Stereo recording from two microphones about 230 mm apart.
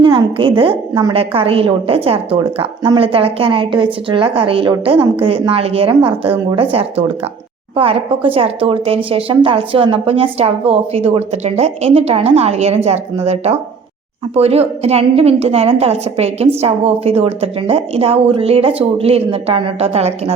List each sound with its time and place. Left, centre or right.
0.0 s a woman's voice: right